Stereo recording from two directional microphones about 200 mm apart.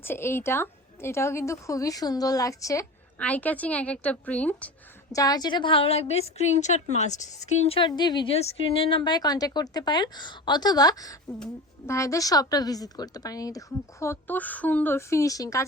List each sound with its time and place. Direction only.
0.0 s a woman's voice: 10° left (ahead or behind)
5.1 s a woman's voice: 20° left (ahead or behind)